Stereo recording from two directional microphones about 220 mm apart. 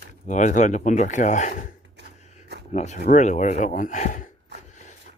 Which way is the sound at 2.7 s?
30° left (ahead or behind).